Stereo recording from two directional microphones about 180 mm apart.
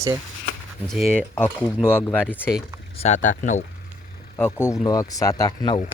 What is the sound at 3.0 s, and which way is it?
Speech, 40° left (ahead or behind).